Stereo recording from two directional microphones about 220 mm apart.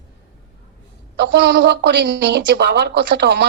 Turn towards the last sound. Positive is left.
turn(degrees=-50)  # may be behind; listen again after turning